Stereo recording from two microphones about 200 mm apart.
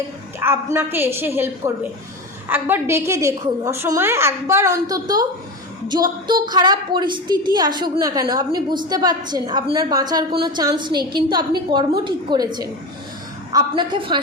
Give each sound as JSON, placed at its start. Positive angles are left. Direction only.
{"t": 0.3, "sound": "a woman's voice", "side_deg": -10}